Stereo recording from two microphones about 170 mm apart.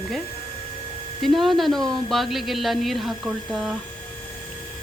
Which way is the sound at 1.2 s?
Centre (ahead or behind).